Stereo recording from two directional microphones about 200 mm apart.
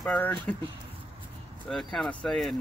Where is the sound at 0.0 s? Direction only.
5° left (ahead or behind).